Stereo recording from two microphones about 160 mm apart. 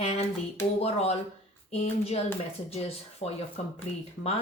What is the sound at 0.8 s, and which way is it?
Speech, 40° left (ahead or behind).